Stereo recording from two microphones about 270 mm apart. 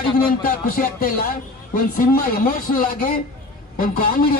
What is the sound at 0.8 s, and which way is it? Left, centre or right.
A man's voice, left.